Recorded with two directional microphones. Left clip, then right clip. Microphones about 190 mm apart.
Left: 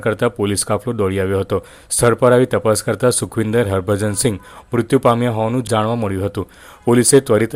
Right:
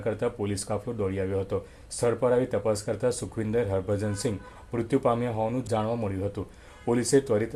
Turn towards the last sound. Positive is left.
turn(degrees=40)  # may be behind; listen again after turning